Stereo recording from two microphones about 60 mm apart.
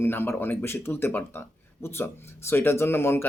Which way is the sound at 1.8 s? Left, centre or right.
Left.